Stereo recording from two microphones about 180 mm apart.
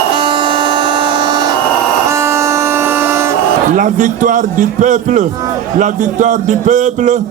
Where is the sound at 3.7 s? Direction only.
45° right (ahead or behind).